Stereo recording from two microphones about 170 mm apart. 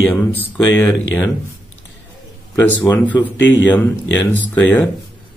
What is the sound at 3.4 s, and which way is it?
Speech, 90° left.